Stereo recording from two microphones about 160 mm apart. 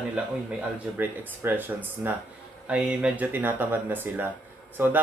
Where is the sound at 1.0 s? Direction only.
10° right (ahead or behind).